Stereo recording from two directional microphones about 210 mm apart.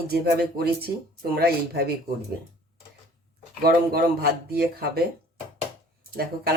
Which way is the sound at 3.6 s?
45° right (ahead or behind).